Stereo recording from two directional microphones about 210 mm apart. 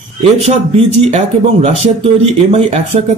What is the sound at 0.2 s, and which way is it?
Speech, 30° right (ahead or behind).